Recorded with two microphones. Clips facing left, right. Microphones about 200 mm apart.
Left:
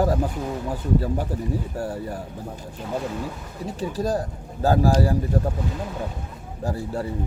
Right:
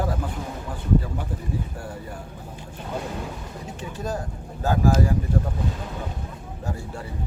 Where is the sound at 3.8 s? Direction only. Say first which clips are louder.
Left 6 dB; 35° left (ahead or behind).